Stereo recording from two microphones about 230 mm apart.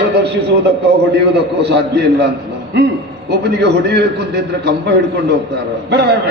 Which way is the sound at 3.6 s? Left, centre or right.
Right.